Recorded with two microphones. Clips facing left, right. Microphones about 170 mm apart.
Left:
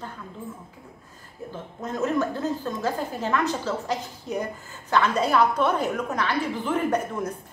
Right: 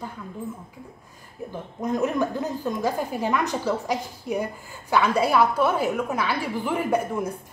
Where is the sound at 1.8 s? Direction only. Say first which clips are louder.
Right 2 dB; 15° right (ahead or behind).